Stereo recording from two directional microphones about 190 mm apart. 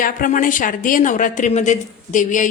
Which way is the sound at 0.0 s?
45° left (ahead or behind).